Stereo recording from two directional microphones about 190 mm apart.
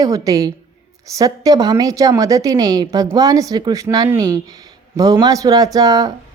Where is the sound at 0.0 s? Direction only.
20° right (ahead or behind).